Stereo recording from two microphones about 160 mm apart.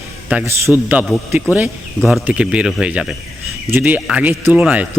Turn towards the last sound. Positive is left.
turn(degrees=-10)  # may be behind; listen again after turning